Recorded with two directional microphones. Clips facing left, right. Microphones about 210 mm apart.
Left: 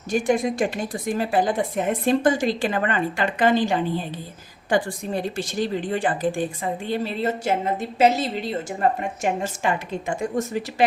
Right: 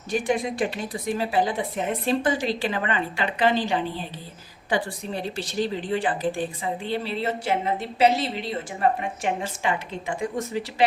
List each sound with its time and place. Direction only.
0.1 s a woman's voice: 45° left (ahead or behind)
5.4 s a woman's voice: 50° left (ahead or behind)
9.2 s a woman's voice: 45° left (ahead or behind)